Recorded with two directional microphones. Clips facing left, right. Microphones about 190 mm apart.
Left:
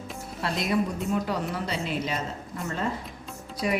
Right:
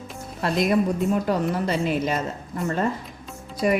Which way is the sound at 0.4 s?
50° right (ahead or behind).